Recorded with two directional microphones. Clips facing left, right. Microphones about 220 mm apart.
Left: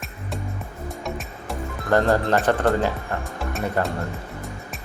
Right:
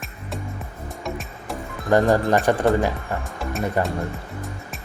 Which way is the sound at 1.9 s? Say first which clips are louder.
Right 2 dB; 15° right (ahead or behind).